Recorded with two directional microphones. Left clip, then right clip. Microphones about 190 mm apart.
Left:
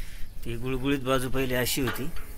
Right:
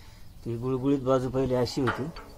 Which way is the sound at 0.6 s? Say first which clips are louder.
Right 2 dB; 40° left (ahead or behind).